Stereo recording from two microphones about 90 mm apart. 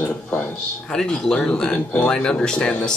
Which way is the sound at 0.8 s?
10° left (ahead or behind).